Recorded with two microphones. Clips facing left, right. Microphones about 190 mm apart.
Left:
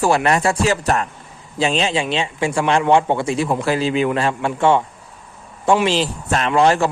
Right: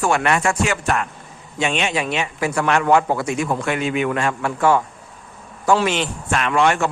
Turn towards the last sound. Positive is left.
turn(degrees=35)  # may be behind; listen again after turning